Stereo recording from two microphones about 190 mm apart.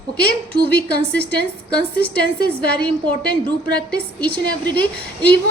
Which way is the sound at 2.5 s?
5° left (ahead or behind).